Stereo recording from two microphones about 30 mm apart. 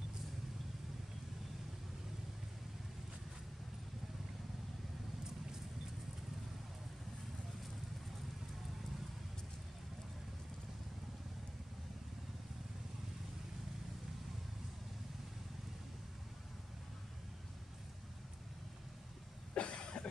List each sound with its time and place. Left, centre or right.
19.5 s cough: left